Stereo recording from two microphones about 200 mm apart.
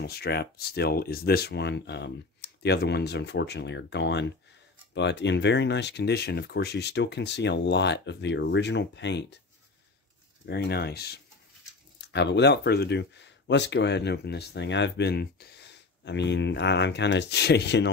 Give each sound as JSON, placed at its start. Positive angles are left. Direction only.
{"t": 0.0, "sound": "speech", "side_deg": 55}
{"t": 10.4, "sound": "speech", "side_deg": 55}